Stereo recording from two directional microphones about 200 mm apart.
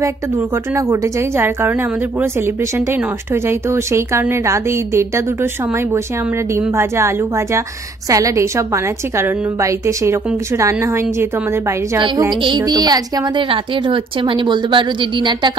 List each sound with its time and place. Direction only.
0.0 s a woman's voice: 15° right (ahead or behind)
12.0 s a woman's voice: 25° right (ahead or behind)